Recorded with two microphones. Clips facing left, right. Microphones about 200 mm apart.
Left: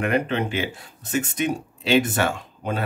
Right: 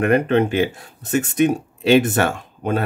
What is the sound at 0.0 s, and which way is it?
Speech, 50° right (ahead or behind).